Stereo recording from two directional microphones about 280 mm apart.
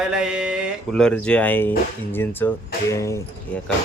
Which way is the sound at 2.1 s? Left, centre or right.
Centre.